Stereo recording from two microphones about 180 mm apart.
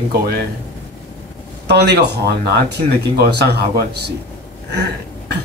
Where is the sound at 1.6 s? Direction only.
65° right (ahead or behind).